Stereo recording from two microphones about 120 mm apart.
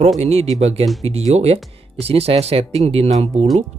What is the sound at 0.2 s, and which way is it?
Speech, 60° right (ahead or behind).